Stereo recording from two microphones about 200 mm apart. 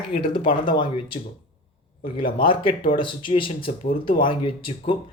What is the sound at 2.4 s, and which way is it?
Speech, 25° left (ahead or behind).